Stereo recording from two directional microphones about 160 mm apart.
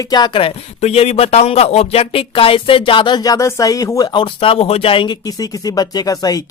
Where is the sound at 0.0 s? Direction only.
25° left (ahead or behind).